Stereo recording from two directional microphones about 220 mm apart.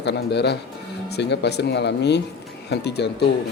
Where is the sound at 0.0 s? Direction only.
50° left (ahead or behind).